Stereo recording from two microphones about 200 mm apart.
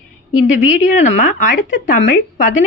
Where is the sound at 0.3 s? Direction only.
40° left (ahead or behind).